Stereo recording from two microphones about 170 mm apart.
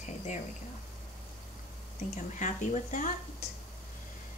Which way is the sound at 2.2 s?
45° left (ahead or behind).